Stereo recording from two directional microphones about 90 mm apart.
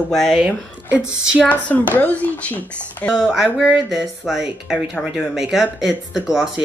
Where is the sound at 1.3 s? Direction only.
15° left (ahead or behind).